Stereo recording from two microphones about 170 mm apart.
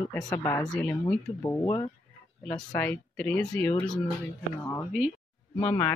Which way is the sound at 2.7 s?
10° left (ahead or behind).